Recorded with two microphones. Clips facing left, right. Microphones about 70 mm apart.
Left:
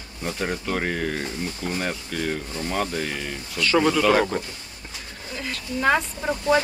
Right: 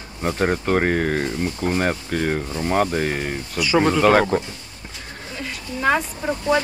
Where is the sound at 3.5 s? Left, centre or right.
Centre.